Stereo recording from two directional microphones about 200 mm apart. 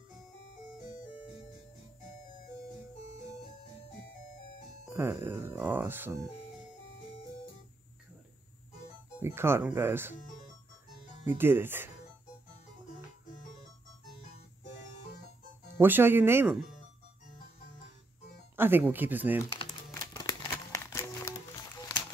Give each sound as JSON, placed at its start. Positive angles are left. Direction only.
{"t": 4.8, "sound": "speech", "side_deg": -10}
{"t": 9.2, "sound": "speech", "side_deg": -10}
{"t": 11.2, "sound": "speech", "side_deg": -10}
{"t": 15.7, "sound": "speech", "side_deg": -10}
{"t": 18.6, "sound": "speech", "side_deg": -10}
{"t": 19.9, "sound": "music", "side_deg": 15}